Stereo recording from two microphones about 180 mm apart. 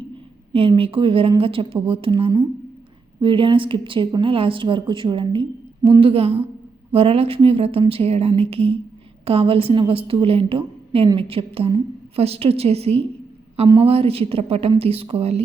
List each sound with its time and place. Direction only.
0.5 s a woman's voice: 30° right (ahead or behind)